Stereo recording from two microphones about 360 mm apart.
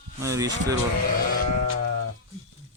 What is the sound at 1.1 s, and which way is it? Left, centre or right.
Sheep, left.